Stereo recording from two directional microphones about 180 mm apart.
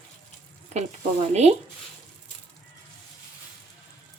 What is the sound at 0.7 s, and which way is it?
Speech, 40° right (ahead or behind).